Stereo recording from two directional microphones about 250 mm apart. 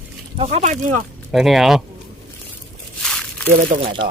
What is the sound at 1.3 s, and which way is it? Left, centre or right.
Speech, centre.